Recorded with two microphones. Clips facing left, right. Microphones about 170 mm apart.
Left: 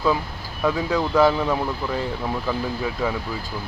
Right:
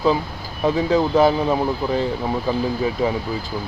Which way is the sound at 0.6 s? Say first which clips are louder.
Right 4 dB; 25° right (ahead or behind).